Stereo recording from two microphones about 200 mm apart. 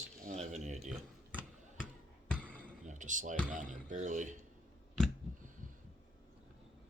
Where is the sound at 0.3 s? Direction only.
35° right (ahead or behind).